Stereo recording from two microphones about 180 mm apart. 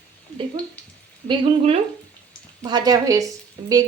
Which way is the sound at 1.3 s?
30° right (ahead or behind).